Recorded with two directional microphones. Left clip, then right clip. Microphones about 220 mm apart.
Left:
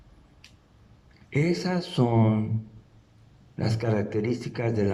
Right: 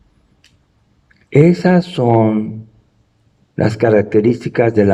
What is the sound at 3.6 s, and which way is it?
A man's voice, 45° right (ahead or behind).